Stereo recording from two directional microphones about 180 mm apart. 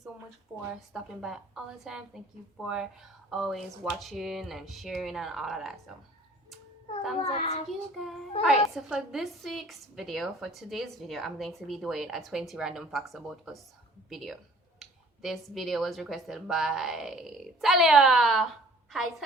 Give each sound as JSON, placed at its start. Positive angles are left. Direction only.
{"t": 0.9, "sound": "a woman's voice", "side_deg": -5}
{"t": 7.3, "sound": "child singing", "side_deg": 40}
{"t": 7.7, "sound": "a woman's voice", "side_deg": 0}